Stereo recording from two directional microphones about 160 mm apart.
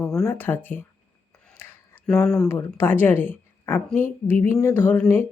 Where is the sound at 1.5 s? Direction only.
15° left (ahead or behind).